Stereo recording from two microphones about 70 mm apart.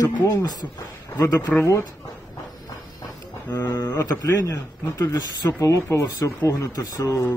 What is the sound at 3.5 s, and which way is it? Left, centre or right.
Speech, left.